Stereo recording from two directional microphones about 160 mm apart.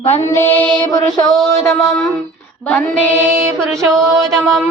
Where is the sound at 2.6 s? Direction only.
10° left (ahead or behind).